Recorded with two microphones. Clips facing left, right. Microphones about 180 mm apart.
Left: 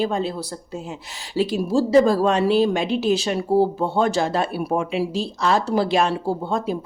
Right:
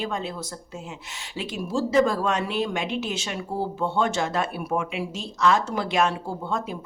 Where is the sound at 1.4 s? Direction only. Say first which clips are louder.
Left 8 dB; 35° left (ahead or behind).